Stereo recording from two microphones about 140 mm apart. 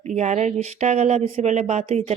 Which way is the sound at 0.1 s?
55° right (ahead or behind).